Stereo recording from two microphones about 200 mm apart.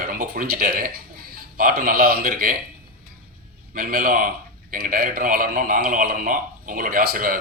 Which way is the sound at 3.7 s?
45° right (ahead or behind).